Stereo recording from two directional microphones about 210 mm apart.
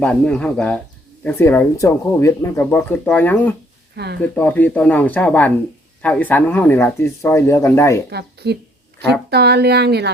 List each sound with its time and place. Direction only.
0.0 s speech: 5° left (ahead or behind)
3.9 s speech: 50° right (ahead or behind)
4.2 s speech: 5° left (ahead or behind)
8.1 s speech: 50° right (ahead or behind)